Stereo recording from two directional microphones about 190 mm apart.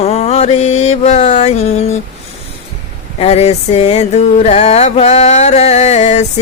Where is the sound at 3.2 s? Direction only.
35° left (ahead or behind).